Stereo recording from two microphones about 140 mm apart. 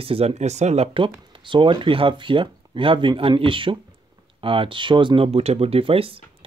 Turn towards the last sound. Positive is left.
turn(degrees=-40)  # may be behind; listen again after turning